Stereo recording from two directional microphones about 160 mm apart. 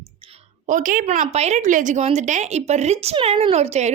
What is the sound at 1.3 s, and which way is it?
A woman's voice, 45° right (ahead or behind).